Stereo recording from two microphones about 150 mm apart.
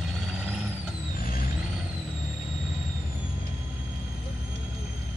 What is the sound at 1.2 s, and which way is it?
Vehicle, 70° left (ahead or behind).